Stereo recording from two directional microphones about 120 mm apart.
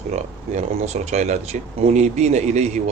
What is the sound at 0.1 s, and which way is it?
A man's voice, 65° right (ahead or behind).